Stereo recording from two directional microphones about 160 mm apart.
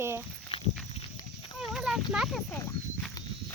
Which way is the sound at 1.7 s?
5° right (ahead or behind).